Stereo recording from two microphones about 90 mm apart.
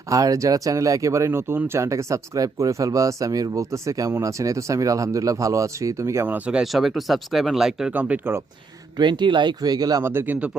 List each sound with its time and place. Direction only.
0.1 s speech: 40° right (ahead or behind)
6.2 s speech: 20° right (ahead or behind)
6.6 s speech: 5° right (ahead or behind)
7.9 s speech: 15° right (ahead or behind)
9.0 s speech: 60° right (ahead or behind)
10.0 s speech: 25° right (ahead or behind)